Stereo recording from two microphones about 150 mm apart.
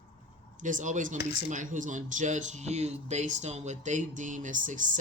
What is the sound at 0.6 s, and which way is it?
Speech, 60° right (ahead or behind).